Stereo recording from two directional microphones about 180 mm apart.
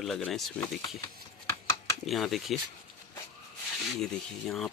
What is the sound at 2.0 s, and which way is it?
Speech, centre (ahead or behind).